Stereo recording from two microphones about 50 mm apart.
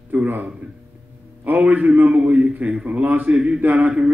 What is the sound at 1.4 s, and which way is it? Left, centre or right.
A man's voice, right.